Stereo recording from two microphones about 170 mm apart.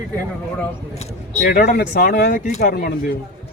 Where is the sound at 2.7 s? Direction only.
60° left (ahead or behind).